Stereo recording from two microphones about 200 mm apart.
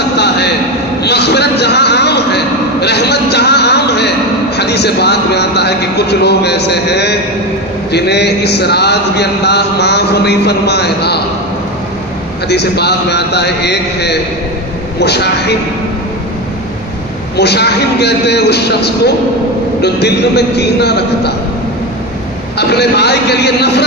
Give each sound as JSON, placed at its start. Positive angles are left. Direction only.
{"t": 1.0, "sound": "a sound", "side_deg": 55}
{"t": 12.4, "sound": "a man's voice", "side_deg": 55}
{"t": 17.4, "sound": "a man's voice", "side_deg": 55}
{"t": 22.6, "sound": "a man's voice", "side_deg": 55}